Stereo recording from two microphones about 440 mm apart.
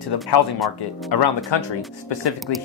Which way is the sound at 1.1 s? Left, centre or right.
Left.